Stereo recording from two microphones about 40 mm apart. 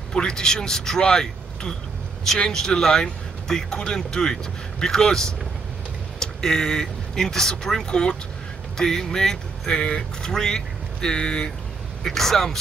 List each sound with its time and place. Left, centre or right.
0.1 s speech: centre
12.0 s speech: centre